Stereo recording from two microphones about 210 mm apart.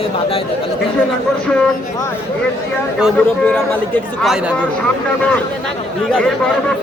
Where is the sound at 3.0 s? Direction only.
5° left (ahead or behind).